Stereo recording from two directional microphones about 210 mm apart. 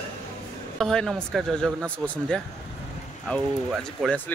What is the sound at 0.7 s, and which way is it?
Speech, centre (ahead or behind).